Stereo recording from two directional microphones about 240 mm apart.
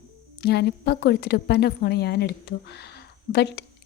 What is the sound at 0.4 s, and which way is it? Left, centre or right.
A woman's voice, left.